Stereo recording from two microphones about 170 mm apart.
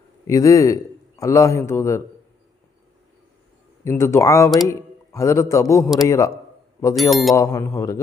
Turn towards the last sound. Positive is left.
turn(degrees=20)  # may be behind; listen again after turning